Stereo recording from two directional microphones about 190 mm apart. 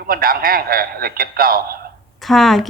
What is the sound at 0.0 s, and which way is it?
A man's voice, 50° right (ahead or behind).